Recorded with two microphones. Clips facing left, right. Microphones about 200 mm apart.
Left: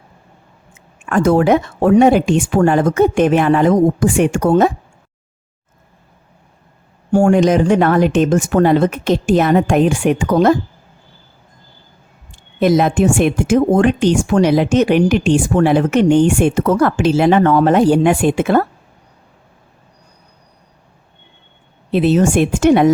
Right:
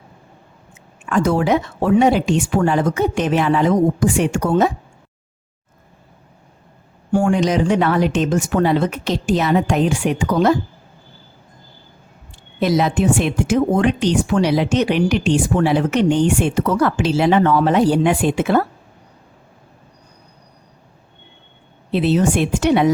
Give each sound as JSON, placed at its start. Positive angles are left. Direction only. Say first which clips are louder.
{"t": 1.0, "sound": "speech", "louder": "left 4 dB", "side_deg": 50}
{"t": 7.1, "sound": "speech", "louder": "left 5 dB", "side_deg": 45}
{"t": 12.5, "sound": "speech", "louder": "left 4 dB", "side_deg": 50}
{"t": 21.9, "sound": "speech", "louder": "left 4 dB", "side_deg": 50}